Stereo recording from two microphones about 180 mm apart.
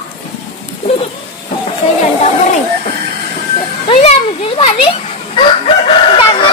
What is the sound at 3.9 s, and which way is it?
Children playing, 35° left (ahead or behind).